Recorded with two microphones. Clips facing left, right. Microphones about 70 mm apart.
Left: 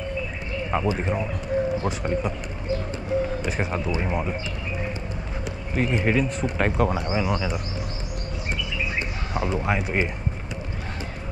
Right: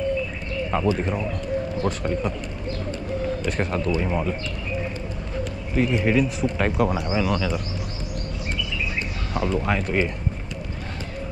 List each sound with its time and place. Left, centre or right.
0.7 s speech: centre
3.4 s speech: centre
5.8 s speech: centre
7.2 s speech: centre
9.3 s speech: centre